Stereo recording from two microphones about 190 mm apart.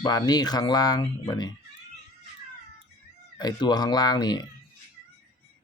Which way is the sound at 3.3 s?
20° left (ahead or behind).